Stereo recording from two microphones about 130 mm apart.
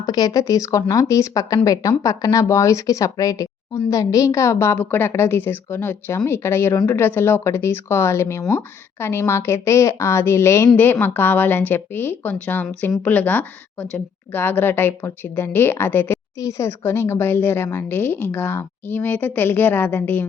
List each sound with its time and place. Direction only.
0.0 s a woman's voice: 30° left (ahead or behind); by 20.2 s 15° left (ahead or behind)